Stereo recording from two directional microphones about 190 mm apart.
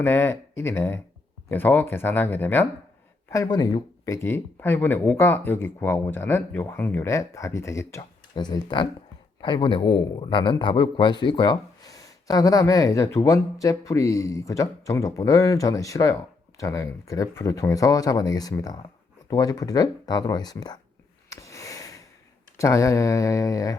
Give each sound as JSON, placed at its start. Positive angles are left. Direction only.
{"t": 0.0, "sound": "a man's voice", "side_deg": 10}
{"t": 21.2, "sound": "a sound", "side_deg": 15}
{"t": 22.5, "sound": "a man's voice", "side_deg": 15}